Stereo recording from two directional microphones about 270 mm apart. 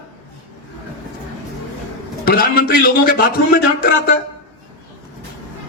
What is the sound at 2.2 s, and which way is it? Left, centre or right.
A man's voice, left.